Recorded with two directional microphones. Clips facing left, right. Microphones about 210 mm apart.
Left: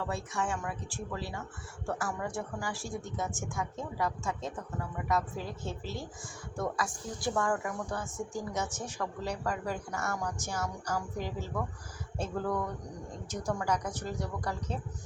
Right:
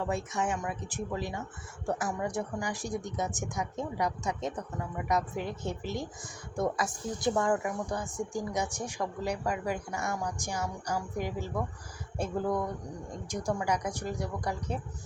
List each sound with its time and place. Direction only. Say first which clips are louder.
0.0 s speech: right 3 dB; 20° right (ahead or behind)